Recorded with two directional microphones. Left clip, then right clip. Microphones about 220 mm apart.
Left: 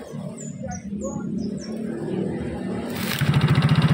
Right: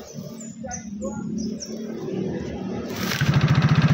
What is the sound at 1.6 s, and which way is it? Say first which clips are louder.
Bird: left 2 dB; 45° left (ahead or behind).